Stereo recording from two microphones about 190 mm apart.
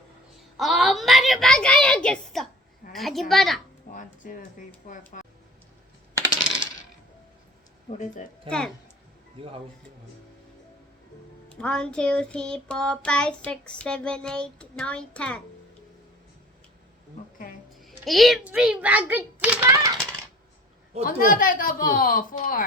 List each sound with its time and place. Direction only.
0.5 s a sound: centre (ahead or behind)
2.9 s child singing: centre (ahead or behind)
3.9 s a sound: 45° left (ahead or behind)
4.9 s speech: 45° left (ahead or behind)
7.9 s speech: 40° left (ahead or behind)
8.4 s child singing: 5° left (ahead or behind)
11.5 s child singing: 5° left (ahead or behind)
17.7 s a child's voice: centre (ahead or behind)
21.0 s speech: 45° left (ahead or behind)